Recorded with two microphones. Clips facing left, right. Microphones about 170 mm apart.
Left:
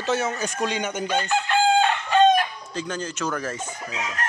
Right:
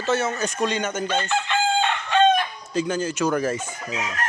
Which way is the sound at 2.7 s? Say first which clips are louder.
Right 6 dB; 10° right (ahead or behind).